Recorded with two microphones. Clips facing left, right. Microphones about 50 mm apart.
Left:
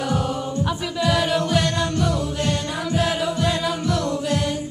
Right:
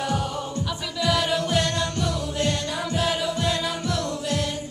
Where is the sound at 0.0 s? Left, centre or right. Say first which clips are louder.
Left 3 dB; centre.